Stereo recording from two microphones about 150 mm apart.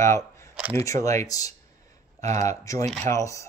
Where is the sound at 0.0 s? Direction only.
20° left (ahead or behind).